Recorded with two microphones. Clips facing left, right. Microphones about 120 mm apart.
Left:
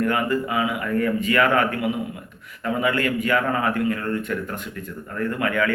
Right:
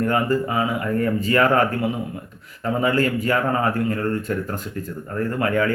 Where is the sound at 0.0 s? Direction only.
35° right (ahead or behind).